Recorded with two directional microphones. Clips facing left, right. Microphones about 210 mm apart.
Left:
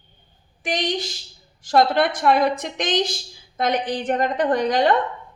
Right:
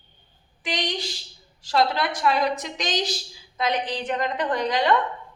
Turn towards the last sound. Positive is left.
turn(degrees=50)  # may be behind; listen again after turning